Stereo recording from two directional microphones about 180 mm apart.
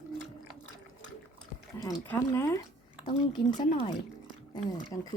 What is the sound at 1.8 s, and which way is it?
Speech, 20° left (ahead or behind).